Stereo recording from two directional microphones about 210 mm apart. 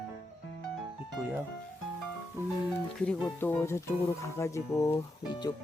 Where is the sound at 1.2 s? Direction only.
10° right (ahead or behind).